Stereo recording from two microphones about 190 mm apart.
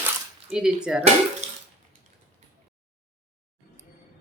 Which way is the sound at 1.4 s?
35° right (ahead or behind).